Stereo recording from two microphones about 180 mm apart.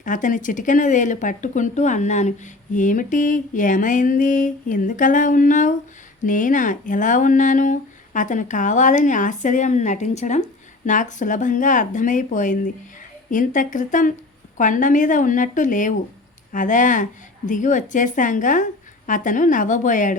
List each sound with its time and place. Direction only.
0.0 s speech: 45° left (ahead or behind)